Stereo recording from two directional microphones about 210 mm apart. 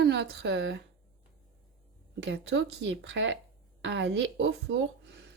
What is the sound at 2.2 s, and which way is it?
A woman's voice, 60° right (ahead or behind).